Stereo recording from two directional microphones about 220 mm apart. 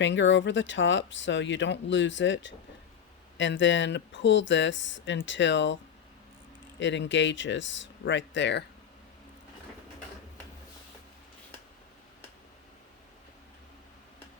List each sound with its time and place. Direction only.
0.0 s speech: 55° left (ahead or behind)